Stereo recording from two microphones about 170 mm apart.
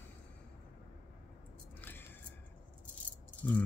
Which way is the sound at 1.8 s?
10° left (ahead or behind).